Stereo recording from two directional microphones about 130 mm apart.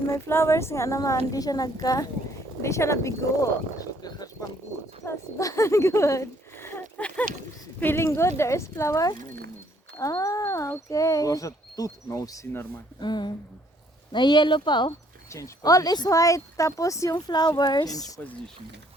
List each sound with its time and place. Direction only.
0.3 s speech: 20° left (ahead or behind)
3.8 s clip-clop: 30° left (ahead or behind)
5.0 s speech: 25° left (ahead or behind)
15.3 s speech: 25° left (ahead or behind)